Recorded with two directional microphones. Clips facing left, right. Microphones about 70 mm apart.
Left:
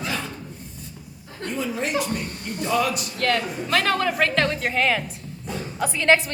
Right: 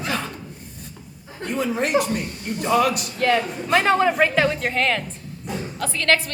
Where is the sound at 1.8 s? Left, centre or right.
Right.